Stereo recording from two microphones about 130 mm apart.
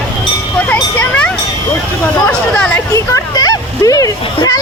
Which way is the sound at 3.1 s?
30° left (ahead or behind).